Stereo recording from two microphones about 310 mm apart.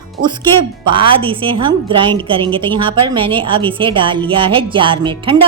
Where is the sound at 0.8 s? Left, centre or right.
Centre.